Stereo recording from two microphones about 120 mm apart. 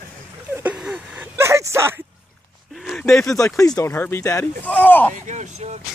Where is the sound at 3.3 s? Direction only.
25° left (ahead or behind).